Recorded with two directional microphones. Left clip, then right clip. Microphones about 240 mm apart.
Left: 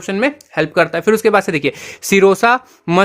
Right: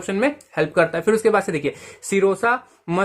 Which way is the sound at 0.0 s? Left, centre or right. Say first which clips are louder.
Left 4 dB; left.